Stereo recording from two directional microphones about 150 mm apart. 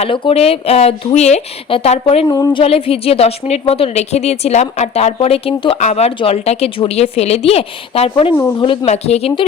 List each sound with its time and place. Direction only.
0.0 s speech: 40° left (ahead or behind)
2.3 s a woman's voice: 30° left (ahead or behind)
8.9 s a woman's voice: 45° left (ahead or behind)